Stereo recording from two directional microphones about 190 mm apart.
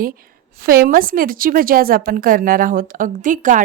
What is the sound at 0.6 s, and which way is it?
A woman's voice, 50° right (ahead or behind).